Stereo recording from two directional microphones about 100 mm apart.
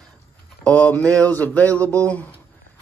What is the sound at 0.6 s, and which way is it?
Speech, 10° left (ahead or behind).